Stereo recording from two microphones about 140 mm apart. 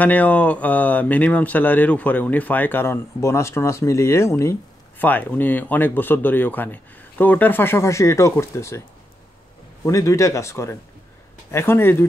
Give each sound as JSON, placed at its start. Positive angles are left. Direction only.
{"t": 0.0, "sound": "speech", "side_deg": 10}
{"t": 9.8, "sound": "speech", "side_deg": 25}